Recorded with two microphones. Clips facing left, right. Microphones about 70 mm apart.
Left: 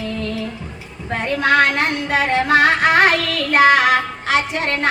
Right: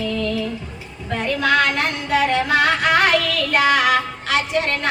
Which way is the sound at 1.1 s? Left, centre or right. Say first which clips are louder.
Left 2 dB; left.